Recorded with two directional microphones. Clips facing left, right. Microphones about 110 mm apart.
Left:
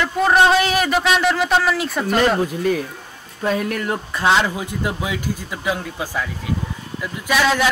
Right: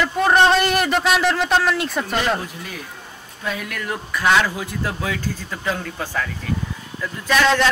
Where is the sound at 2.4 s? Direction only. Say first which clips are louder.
Left 13 dB; 45° left (ahead or behind).